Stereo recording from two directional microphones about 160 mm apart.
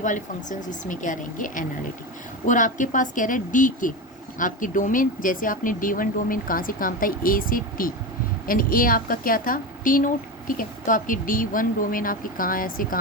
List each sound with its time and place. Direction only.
0.0 s a woman's voice: 50° left (ahead or behind)